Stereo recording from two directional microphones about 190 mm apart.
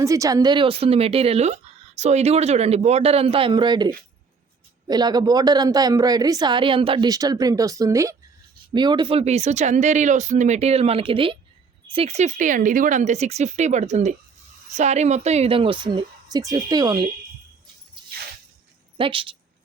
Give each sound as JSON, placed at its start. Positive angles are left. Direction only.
{"t": 0.0, "sound": "a woman's voice", "side_deg": -15}
{"t": 18.9, "sound": "a woman's voice", "side_deg": -25}